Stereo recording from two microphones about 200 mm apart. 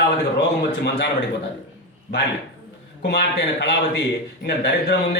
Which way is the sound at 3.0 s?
55° left (ahead or behind).